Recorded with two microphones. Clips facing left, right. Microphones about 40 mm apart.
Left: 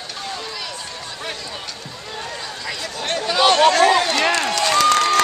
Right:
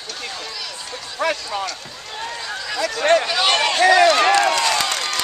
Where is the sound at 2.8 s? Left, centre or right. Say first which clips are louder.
Right 10 dB; right.